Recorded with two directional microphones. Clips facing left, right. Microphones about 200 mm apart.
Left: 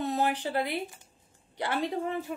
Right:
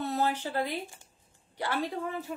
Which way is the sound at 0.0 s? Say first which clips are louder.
Left 1 dB; 15° left (ahead or behind).